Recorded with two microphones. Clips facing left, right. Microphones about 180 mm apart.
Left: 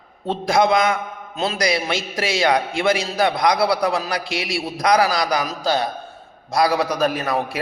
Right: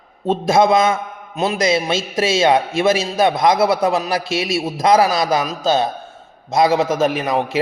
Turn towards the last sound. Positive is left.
turn(degrees=-20)  # may be behind; listen again after turning